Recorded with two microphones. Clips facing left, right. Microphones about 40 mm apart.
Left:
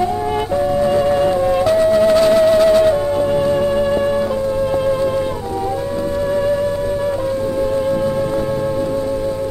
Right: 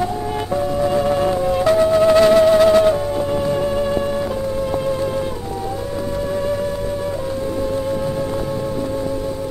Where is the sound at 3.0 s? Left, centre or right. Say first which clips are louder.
Left 4 dB; centre.